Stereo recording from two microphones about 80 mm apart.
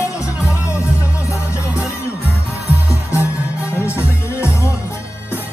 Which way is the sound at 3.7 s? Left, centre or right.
Left.